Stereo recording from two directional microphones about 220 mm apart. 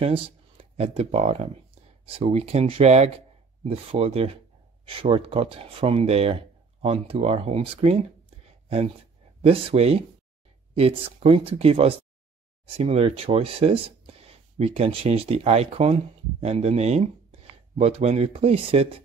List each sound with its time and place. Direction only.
0.0 s speech: 25° right (ahead or behind)
8.5 s a sound: 30° right (ahead or behind)
9.4 s speech: 25° right (ahead or behind)